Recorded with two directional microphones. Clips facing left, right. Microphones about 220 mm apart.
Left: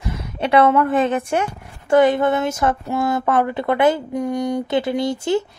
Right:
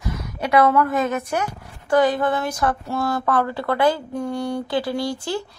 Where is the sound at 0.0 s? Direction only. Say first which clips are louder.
Left 3 dB; 25° left (ahead or behind).